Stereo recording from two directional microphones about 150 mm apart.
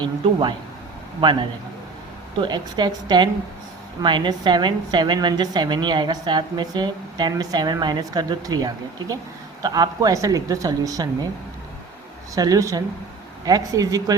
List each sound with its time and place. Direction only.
0.0 s a woman's voice: 30° right (ahead or behind)
12.3 s a woman's voice: 25° right (ahead or behind)